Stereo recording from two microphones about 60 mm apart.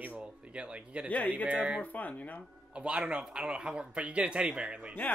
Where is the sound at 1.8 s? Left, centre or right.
Left.